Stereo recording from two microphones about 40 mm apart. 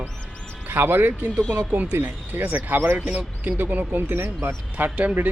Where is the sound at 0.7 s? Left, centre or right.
Right.